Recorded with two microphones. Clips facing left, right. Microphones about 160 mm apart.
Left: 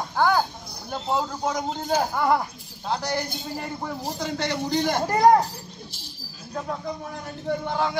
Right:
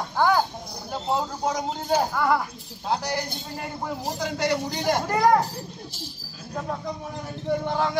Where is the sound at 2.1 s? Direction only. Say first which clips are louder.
Left 1 dB; 20° left (ahead or behind).